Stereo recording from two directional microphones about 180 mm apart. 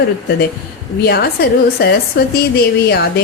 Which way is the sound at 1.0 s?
60° left (ahead or behind).